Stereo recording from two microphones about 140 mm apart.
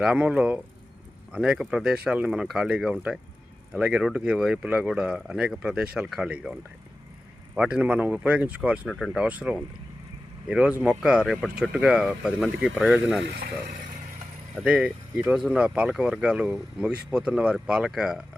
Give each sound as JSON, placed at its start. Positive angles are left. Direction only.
{"t": 0.0, "sound": "speech", "side_deg": -5}
{"t": 8.9, "sound": "speech", "side_deg": 0}
{"t": 14.5, "sound": "speech", "side_deg": -5}